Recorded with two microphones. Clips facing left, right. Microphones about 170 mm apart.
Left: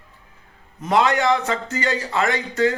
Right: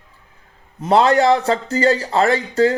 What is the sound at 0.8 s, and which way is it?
A man's voice, 35° right (ahead or behind).